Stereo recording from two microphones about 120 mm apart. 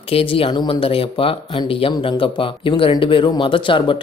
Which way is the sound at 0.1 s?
50° left (ahead or behind).